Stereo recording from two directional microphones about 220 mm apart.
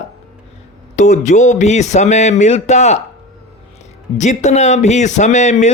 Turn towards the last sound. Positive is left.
turn(degrees=30)  # may be behind; listen again after turning